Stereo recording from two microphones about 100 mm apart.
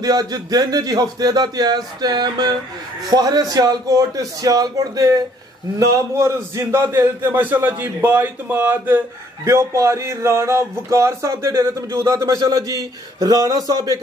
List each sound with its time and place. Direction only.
0.0 s a man's voice: 40° right (ahead or behind)